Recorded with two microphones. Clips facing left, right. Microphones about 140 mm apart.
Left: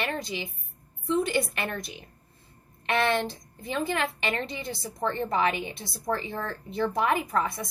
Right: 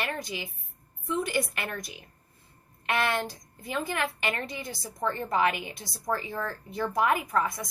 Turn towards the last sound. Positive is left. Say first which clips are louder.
# left 1 dB
turn(degrees=25)  # may be behind; listen again after turning